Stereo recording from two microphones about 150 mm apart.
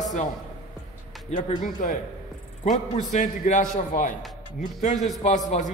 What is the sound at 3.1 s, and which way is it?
A man's voice, 60° left (ahead or behind).